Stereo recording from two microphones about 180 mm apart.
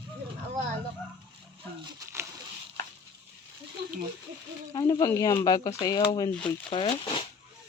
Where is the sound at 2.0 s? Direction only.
15° right (ahead or behind).